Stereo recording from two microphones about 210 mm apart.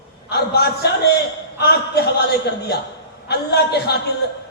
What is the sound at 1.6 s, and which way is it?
Speech, 50° left (ahead or behind).